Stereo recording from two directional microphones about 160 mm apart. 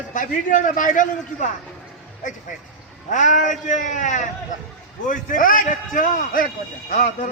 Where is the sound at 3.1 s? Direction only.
50° left (ahead or behind).